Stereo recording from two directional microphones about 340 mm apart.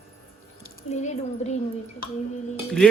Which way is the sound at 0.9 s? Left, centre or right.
Centre.